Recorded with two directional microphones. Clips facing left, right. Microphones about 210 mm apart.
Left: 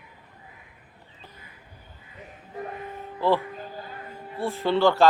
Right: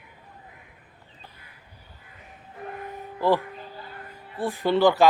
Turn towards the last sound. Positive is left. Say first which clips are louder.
# right 1 dB
turn(degrees=-15)  # may be behind; listen again after turning